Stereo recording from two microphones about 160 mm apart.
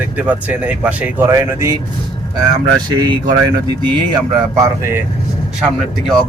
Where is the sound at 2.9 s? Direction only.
25° right (ahead or behind).